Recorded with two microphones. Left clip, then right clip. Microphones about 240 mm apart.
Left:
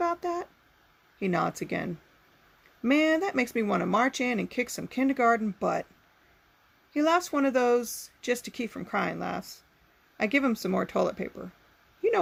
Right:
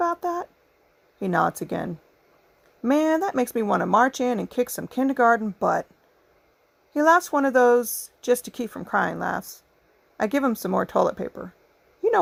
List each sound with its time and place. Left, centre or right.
0.0 s a sound: right
1.2 s speech: right
6.9 s speech: right